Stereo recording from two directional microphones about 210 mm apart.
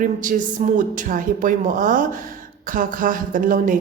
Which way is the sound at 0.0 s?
40° right (ahead or behind).